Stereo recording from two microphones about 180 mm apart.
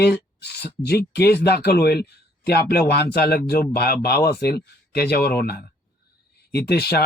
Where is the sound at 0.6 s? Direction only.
60° left (ahead or behind).